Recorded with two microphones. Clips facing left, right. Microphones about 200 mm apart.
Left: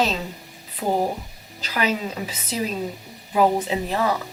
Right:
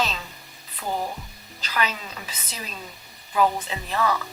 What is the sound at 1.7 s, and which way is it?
Speech, 15° left (ahead or behind).